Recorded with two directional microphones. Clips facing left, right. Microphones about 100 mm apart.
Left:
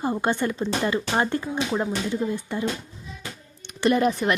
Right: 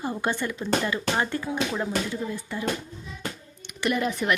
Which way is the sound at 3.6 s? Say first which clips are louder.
Left 5 dB; 30° left (ahead or behind).